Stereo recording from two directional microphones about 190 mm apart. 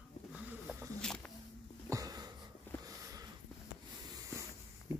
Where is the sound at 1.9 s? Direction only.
20° right (ahead or behind).